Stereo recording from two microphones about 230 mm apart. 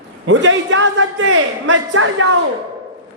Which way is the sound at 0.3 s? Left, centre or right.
Right.